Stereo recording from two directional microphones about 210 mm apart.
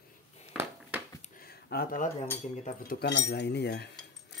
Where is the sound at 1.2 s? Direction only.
45° left (ahead or behind).